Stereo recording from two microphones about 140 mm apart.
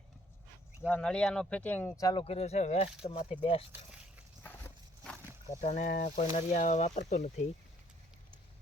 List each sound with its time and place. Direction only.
0.9 s speech: 10° left (ahead or behind)
2.0 s speech: 25° left (ahead or behind)
2.2 s speech: 50° left (ahead or behind)
4.4 s horse: 15° left (ahead or behind)
5.5 s speech: 55° left (ahead or behind)
6.3 s speech: 60° left (ahead or behind)